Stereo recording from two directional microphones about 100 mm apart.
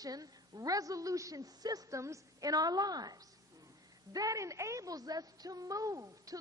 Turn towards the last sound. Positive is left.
turn(degrees=-35)  # may be behind; listen again after turning